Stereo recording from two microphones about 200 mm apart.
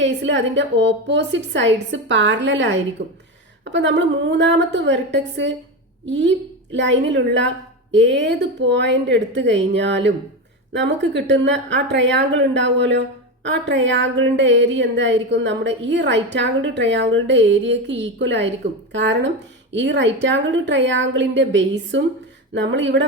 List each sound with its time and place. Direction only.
0.0 s a woman's voice: 65° right (ahead or behind)